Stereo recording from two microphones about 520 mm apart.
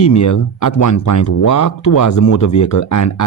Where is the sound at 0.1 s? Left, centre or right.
Left.